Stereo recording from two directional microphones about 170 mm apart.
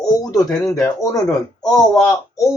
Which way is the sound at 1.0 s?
20° left (ahead or behind).